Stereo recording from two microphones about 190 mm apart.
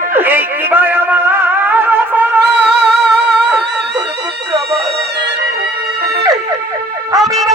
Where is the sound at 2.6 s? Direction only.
60° right (ahead or behind).